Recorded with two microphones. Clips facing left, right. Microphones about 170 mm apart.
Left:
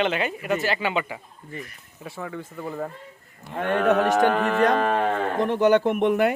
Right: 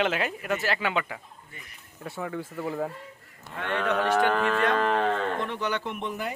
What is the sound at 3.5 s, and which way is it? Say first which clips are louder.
Speech: left 7 dB; 45° left (ahead or behind).